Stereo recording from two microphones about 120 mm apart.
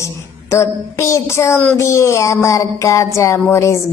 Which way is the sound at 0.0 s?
25° left (ahead or behind).